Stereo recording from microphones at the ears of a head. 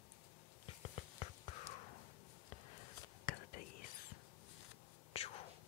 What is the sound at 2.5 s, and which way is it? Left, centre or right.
Whispering, left.